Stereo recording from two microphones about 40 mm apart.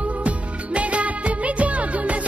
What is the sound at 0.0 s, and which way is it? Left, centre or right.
Music, right.